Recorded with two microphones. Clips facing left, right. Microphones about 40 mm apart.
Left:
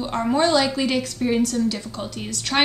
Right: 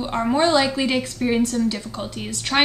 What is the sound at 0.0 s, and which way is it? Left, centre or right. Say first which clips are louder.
A woman's voice: right 1 dB; centre.